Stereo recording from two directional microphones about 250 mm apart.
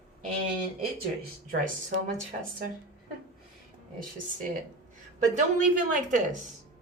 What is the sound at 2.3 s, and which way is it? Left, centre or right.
Speech, right.